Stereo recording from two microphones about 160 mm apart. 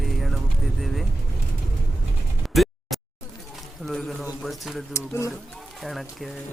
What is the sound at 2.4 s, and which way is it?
Music, centre (ahead or behind).